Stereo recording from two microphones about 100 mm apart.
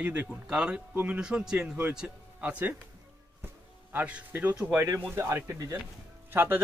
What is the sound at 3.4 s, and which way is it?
Insect, 15° right (ahead or behind).